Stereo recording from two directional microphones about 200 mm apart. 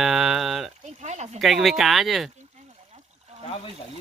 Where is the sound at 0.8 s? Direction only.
35° right (ahead or behind).